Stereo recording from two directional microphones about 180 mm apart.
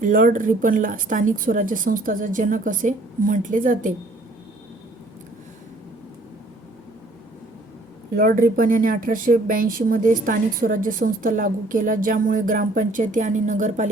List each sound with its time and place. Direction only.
0.0 s speech: 50° right (ahead or behind)
8.1 s speech: 50° right (ahead or behind)